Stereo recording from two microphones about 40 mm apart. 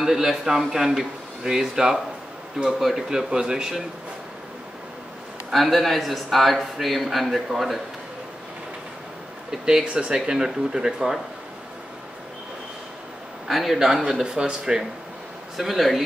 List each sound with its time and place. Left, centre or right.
0.0 s speech: centre
5.5 s a man's voice: centre
9.5 s speech: centre
13.5 s speech: centre
14.2 s speech: right
15.5 s a man's voice: centre